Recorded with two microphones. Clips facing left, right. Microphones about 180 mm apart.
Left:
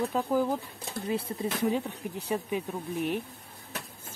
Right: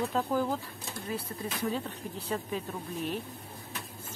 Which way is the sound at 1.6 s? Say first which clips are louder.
Left 4 dB; 15° left (ahead or behind).